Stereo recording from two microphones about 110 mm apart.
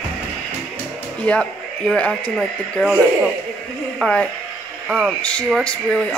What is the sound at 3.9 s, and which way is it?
A woman's voice, 5° left (ahead or behind).